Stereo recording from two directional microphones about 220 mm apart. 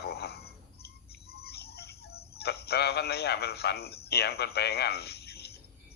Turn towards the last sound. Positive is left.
turn(degrees=45)  # may be behind; listen again after turning